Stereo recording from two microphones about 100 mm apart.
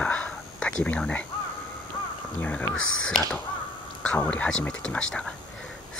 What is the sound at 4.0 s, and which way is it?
Speech, 15° left (ahead or behind).